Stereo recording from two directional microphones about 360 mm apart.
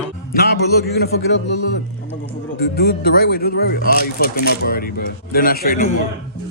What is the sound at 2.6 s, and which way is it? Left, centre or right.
Speech, left.